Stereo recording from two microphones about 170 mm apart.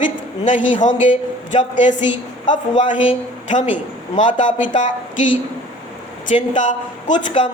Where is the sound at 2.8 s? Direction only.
30° left (ahead or behind).